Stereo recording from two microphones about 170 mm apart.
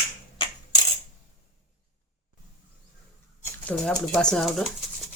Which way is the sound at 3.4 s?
5° left (ahead or behind).